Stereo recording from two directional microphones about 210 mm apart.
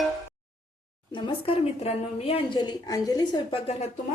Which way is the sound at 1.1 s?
25° left (ahead or behind).